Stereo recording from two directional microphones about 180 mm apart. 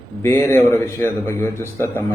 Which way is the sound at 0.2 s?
15° left (ahead or behind).